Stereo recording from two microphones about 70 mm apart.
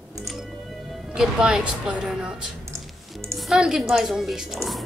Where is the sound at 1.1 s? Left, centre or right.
Centre.